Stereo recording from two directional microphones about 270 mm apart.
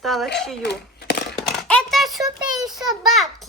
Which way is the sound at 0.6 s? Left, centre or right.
Left.